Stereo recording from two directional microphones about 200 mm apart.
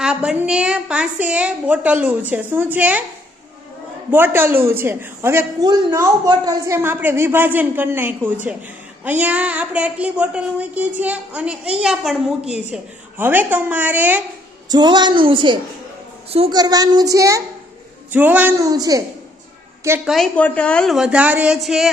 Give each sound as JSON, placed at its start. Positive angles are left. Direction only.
{"t": 0.0, "sound": "speech", "side_deg": -5}
{"t": 4.1, "sound": "speech", "side_deg": -10}
{"t": 14.7, "sound": "a child's voice", "side_deg": -20}
{"t": 20.1, "sound": "a woman's voice", "side_deg": 0}